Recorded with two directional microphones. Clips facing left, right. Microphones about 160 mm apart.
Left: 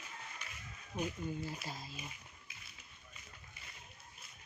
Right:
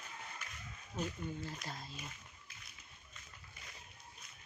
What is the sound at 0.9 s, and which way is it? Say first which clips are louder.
Speech: left 2 dB; 10° left (ahead or behind).